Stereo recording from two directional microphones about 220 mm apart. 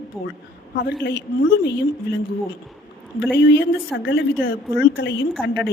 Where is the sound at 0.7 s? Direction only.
50° left (ahead or behind).